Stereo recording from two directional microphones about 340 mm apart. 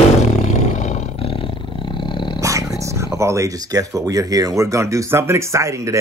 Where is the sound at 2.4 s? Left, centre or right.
Centre.